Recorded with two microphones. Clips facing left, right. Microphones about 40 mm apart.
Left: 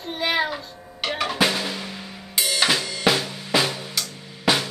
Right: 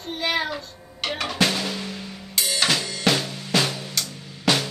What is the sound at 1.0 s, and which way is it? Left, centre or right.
Drum, centre.